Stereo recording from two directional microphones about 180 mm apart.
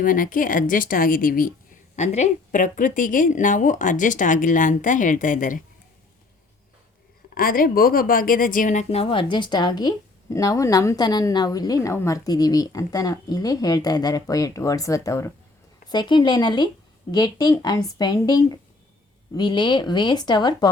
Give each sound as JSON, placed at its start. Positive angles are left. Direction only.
{"t": 0.0, "sound": "speech", "side_deg": 50}
{"t": 7.3, "sound": "a woman's voice", "side_deg": 50}